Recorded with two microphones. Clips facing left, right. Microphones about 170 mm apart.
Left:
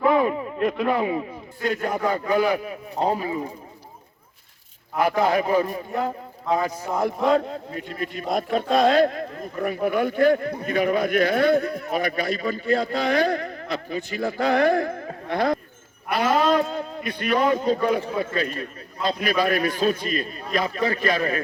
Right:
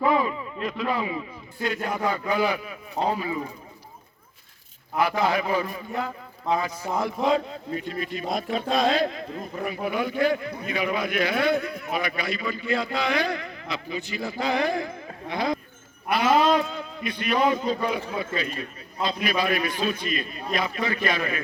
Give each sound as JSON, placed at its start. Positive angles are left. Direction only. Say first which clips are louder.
{"t": 0.0, "sound": "a man's voice", "louder": "left 3 dB", "side_deg": 55}
{"t": 4.9, "sound": "a man's voice", "louder": "left 3 dB", "side_deg": 50}